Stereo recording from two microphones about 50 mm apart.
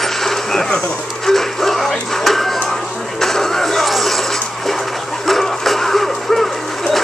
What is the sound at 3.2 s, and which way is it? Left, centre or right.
Music, centre.